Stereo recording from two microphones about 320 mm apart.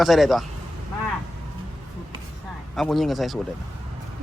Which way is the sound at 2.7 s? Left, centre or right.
Centre.